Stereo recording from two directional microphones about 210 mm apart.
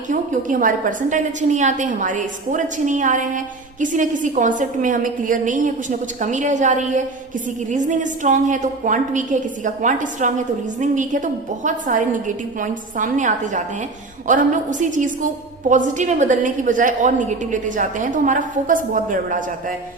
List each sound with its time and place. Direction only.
0.1 s a woman's voice: 40° right (ahead or behind)